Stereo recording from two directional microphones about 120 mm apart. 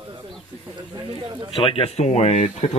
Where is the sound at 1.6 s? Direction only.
50° left (ahead or behind).